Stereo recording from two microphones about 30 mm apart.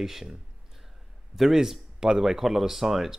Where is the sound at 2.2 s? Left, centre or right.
Centre.